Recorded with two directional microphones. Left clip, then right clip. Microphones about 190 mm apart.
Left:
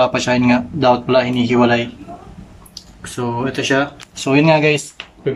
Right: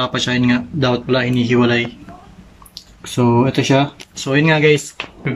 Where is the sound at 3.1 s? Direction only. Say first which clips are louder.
Right 5 dB; 20° right (ahead or behind).